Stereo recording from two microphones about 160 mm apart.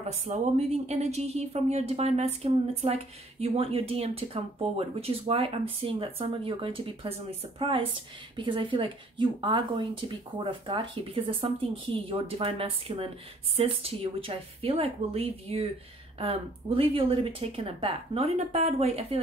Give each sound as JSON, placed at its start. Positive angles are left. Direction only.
{"t": 0.1, "sound": "speech", "side_deg": -45}